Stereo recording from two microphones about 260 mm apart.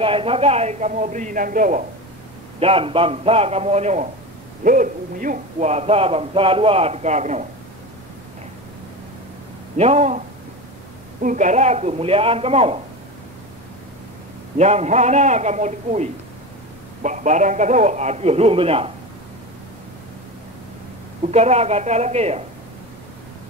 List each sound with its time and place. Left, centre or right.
0.0 s speech: right
9.8 s speech: right
14.6 s speech: right
21.3 s speech: right